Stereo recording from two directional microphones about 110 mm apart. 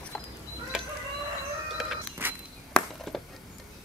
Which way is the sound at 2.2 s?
20° right (ahead or behind).